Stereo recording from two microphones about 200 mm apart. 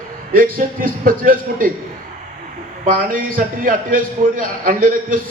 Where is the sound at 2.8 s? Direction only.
45° right (ahead or behind).